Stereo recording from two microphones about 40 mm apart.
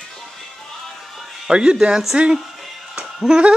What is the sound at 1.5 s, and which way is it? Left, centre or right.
Speech, right.